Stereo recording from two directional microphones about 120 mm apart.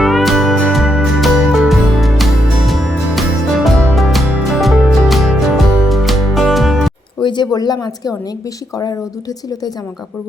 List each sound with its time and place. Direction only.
0.0 s music: centre (ahead or behind)
7.2 s speech: 40° left (ahead or behind)